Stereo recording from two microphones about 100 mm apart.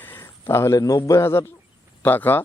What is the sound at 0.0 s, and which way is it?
A man's voice, 20° left (ahead or behind).